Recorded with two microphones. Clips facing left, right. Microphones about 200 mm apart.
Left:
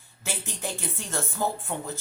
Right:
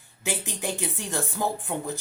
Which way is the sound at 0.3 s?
15° right (ahead or behind).